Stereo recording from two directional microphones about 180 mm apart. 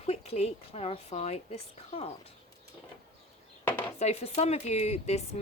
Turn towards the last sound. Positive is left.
turn(degrees=35)  # may be behind; listen again after turning